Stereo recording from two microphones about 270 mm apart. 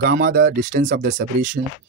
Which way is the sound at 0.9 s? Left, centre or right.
Right.